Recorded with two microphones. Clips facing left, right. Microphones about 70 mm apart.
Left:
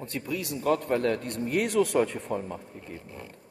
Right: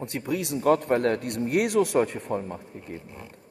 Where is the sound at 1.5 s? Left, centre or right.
Right.